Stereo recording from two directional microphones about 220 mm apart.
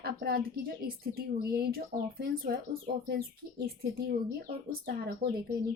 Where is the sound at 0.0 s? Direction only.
45° right (ahead or behind).